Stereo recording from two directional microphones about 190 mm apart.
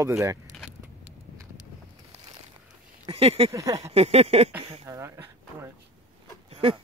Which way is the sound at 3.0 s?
30° right (ahead or behind).